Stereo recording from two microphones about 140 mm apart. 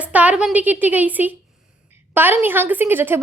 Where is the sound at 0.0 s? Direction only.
10° right (ahead or behind).